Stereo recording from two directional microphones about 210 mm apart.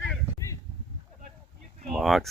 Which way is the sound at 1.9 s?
Centre (ahead or behind).